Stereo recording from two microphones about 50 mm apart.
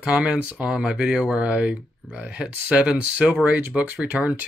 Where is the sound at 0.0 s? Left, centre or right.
Right.